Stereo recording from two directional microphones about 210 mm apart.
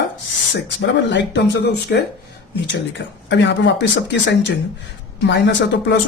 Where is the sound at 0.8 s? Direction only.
55° left (ahead or behind).